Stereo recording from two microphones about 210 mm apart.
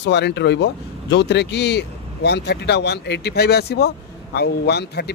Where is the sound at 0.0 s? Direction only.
55° left (ahead or behind).